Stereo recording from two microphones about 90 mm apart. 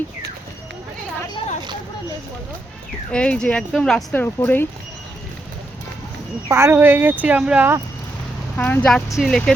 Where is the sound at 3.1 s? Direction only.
10° left (ahead or behind).